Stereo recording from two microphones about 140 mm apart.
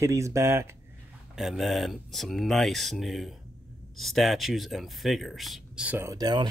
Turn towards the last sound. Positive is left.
turn(degrees=-25)  # may be behind; listen again after turning